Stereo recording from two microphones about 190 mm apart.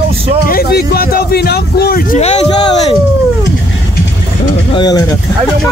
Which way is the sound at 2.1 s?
35° left (ahead or behind).